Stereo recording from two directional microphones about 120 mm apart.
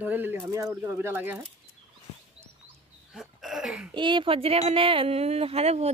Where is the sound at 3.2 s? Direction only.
Centre (ahead or behind).